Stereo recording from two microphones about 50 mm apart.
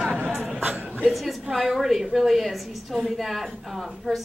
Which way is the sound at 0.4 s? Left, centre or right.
Right.